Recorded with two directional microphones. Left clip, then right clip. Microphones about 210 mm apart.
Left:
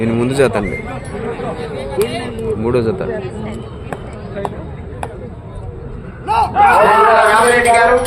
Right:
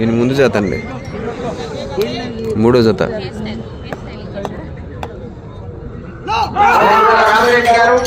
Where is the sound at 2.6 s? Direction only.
35° right (ahead or behind).